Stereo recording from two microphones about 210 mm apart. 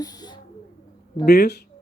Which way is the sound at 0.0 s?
20° left (ahead or behind).